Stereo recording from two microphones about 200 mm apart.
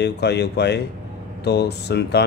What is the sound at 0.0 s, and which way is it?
Speech, 55° left (ahead or behind).